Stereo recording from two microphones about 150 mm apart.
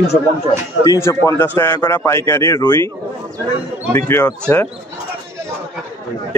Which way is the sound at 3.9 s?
15° left (ahead or behind).